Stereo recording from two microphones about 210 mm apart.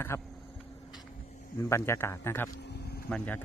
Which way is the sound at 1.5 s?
15° left (ahead or behind).